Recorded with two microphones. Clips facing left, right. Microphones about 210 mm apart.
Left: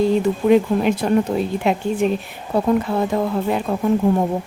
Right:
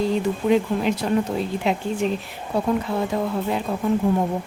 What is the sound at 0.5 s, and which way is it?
Speech, 55° left (ahead or behind).